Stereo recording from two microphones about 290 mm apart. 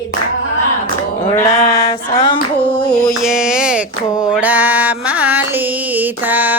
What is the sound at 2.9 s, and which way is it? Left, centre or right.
Music, centre.